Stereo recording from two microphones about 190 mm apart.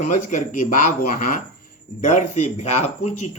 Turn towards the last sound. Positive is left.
turn(degrees=35)  # may be behind; listen again after turning